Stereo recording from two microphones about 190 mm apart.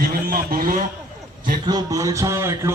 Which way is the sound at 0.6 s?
45° right (ahead or behind).